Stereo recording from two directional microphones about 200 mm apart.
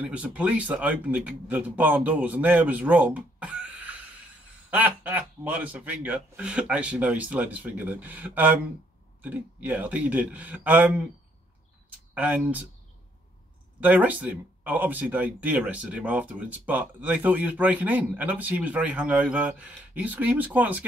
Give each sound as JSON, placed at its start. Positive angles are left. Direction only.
{"t": 0.0, "sound": "speech", "side_deg": -5}
{"t": 12.1, "sound": "speech", "side_deg": -10}
{"t": 13.7, "sound": "speech", "side_deg": -5}